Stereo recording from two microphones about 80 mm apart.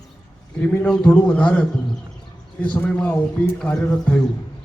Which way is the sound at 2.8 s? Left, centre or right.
Centre.